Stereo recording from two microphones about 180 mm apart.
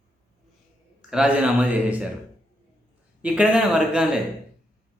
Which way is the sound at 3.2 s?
5° right (ahead or behind).